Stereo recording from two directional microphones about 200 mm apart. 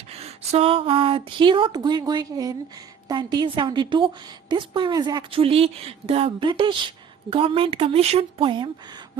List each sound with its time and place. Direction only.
0.1 s a woman's voice: 30° right (ahead or behind)